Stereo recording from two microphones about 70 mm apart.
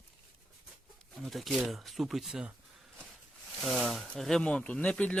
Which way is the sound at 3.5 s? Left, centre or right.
Centre.